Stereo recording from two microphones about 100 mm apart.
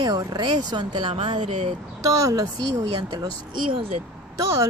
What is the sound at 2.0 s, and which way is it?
Speech, 35° right (ahead or behind).